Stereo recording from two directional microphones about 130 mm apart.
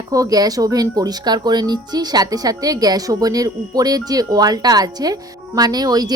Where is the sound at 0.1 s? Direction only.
30° right (ahead or behind).